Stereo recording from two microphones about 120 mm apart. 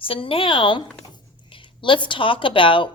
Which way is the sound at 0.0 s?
50° left (ahead or behind).